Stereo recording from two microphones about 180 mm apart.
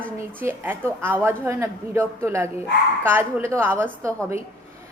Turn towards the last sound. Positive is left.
turn(degrees=-15)  # may be behind; listen again after turning